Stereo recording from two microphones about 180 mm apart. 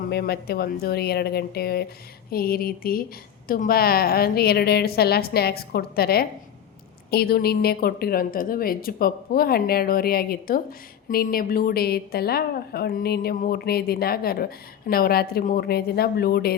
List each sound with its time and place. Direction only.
0.0 s a woman's voice: 60° left (ahead or behind)